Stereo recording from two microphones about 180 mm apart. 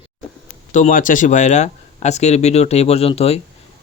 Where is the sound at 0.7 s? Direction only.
45° left (ahead or behind).